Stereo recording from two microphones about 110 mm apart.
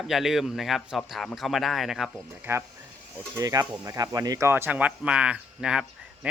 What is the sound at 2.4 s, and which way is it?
Speech, 20° right (ahead or behind).